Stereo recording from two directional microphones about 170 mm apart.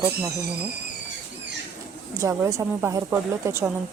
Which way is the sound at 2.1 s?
15° right (ahead or behind).